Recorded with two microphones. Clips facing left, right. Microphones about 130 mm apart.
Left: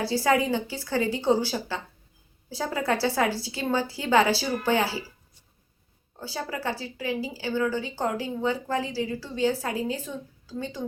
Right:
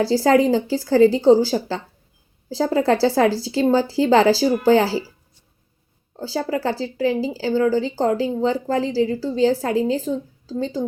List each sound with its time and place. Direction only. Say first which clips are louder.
0.1 s a woman's voice: right 6 dB; 30° right (ahead or behind)
6.1 s a woman's voice: right 9 dB; 30° right (ahead or behind)